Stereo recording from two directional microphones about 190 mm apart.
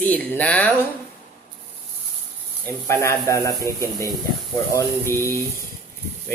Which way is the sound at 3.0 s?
15° left (ahead or behind).